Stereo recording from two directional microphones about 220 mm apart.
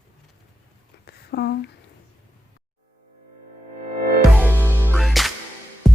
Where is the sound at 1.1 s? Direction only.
45° left (ahead or behind).